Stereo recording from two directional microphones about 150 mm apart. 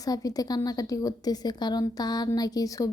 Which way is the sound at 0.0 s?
25° left (ahead or behind).